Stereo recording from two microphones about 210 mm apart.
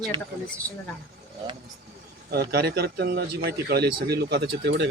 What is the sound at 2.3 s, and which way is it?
Speech, 50° right (ahead or behind).